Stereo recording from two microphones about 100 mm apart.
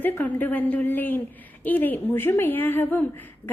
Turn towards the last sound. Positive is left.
turn(degrees=20)  # may be behind; listen again after turning